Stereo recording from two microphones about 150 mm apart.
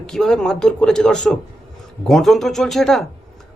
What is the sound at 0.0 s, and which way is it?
A man's voice, 5° left (ahead or behind).